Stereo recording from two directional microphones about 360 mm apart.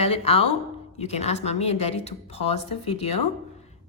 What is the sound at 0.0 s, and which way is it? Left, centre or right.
A woman's voice, centre.